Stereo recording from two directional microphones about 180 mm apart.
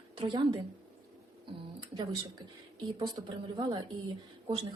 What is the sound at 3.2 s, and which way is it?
Speech, 30° right (ahead or behind).